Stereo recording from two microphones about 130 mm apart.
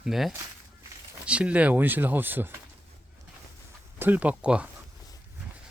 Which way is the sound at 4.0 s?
15° right (ahead or behind).